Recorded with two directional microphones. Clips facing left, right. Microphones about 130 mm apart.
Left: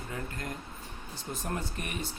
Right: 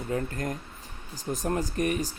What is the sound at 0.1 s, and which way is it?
Speech, 40° right (ahead or behind).